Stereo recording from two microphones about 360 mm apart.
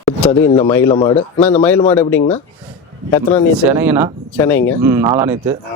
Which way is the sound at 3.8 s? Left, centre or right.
Centre.